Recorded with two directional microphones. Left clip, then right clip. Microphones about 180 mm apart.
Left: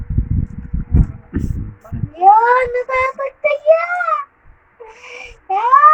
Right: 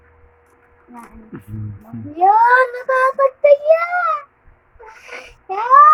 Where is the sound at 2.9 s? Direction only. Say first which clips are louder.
Right 3 dB; 15° right (ahead or behind).